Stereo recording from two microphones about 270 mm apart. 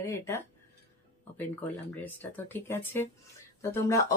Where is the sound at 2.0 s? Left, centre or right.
Centre.